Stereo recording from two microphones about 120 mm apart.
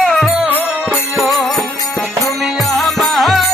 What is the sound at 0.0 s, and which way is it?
Music, 5° right (ahead or behind).